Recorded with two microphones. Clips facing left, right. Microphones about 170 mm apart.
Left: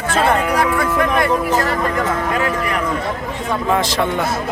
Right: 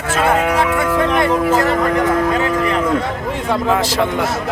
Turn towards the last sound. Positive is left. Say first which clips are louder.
# right 1 dB
turn(degrees=-10)  # may be behind; listen again after turning